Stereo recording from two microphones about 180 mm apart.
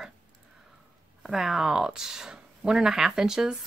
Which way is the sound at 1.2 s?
Centre (ahead or behind).